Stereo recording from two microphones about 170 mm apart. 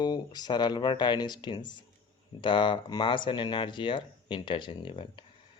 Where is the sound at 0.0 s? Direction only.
25° left (ahead or behind).